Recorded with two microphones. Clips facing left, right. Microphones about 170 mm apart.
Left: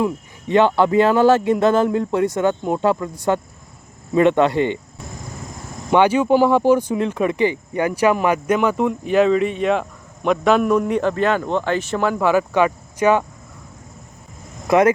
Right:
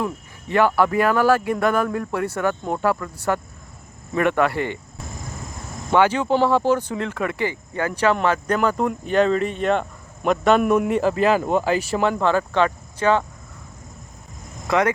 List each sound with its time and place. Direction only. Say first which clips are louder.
0.0 s speech: left 5 dB; 20° left (ahead or behind)
5.9 s a man's voice: left 3 dB; 15° left (ahead or behind); by 12.0 s 10° right (ahead or behind)
12.2 s speech: left 3 dB; 10° left (ahead or behind)
14.7 s speech: left 5 dB; 20° left (ahead or behind)